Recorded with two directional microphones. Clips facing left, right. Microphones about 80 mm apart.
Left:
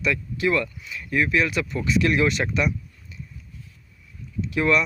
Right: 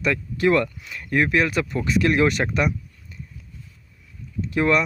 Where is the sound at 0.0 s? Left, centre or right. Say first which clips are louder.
Right 3 dB; right.